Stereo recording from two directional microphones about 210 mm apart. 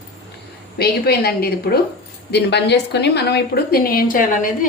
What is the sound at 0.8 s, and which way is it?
A woman's voice, 50° left (ahead or behind).